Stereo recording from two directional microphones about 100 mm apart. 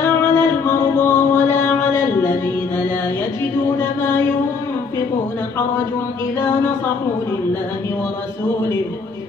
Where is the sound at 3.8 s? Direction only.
25° left (ahead or behind).